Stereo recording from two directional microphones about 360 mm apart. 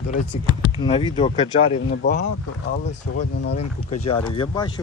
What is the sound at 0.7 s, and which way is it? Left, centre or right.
Speech, centre.